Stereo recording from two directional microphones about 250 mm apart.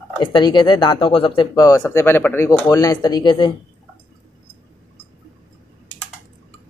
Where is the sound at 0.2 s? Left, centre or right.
Centre.